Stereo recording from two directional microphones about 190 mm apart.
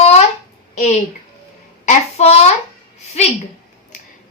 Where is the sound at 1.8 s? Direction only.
35° left (ahead or behind).